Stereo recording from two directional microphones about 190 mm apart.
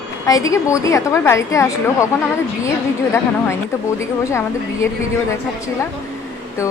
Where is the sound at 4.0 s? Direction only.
15° left (ahead or behind).